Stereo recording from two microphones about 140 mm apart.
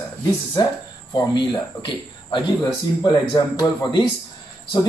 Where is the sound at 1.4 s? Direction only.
35° left (ahead or behind).